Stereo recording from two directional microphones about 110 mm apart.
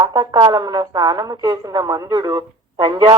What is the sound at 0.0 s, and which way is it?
Speech, 35° right (ahead or behind).